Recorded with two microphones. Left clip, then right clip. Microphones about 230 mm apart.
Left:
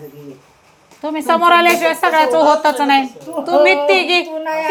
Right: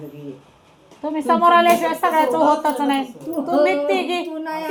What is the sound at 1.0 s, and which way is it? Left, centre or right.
A woman's voice, left.